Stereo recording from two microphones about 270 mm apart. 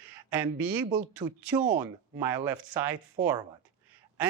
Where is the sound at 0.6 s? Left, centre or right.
Centre.